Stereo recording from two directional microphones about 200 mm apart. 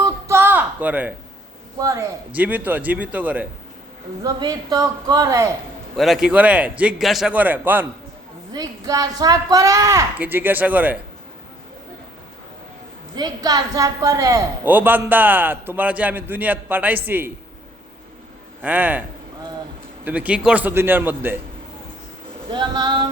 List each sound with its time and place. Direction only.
0.0 s a sound: 15° right (ahead or behind)
1.8 s a woman's voice: 15° right (ahead or behind)
4.2 s speech: 20° right (ahead or behind)
6.0 s a woman's voice: centre (ahead or behind)
13.1 s a woman's voice: 20° right (ahead or behind)
18.6 s a woman's voice: 10° right (ahead or behind)
20.1 s a woman's voice: 5° right (ahead or behind)
22.5 s speech: 25° right (ahead or behind)